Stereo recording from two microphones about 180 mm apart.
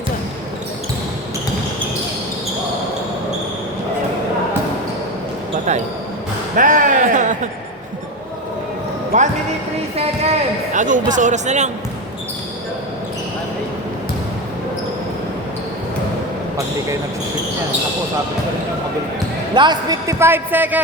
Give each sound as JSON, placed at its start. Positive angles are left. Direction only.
{"t": 6.6, "sound": "speech", "side_deg": -50}
{"t": 9.1, "sound": "speech", "side_deg": -45}
{"t": 19.5, "sound": "a man's voice", "side_deg": -25}